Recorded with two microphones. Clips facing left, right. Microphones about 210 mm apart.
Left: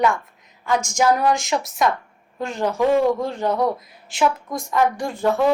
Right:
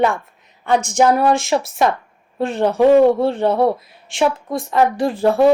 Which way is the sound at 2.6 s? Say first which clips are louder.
Right 7 dB; 35° right (ahead or behind).